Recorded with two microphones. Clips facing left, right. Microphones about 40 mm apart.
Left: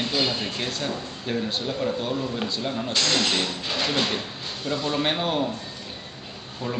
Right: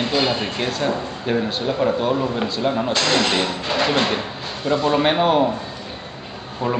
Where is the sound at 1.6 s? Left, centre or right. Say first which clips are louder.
Right 10 dB; right.